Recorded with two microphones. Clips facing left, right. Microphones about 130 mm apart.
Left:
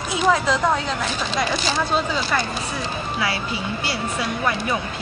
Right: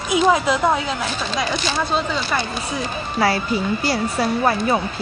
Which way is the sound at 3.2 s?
40° right (ahead or behind).